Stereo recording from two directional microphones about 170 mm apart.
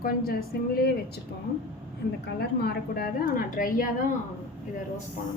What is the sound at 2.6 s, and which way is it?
A woman's voice, 65° left (ahead or behind).